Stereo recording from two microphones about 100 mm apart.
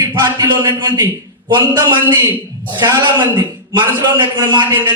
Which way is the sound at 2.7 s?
50° right (ahead or behind).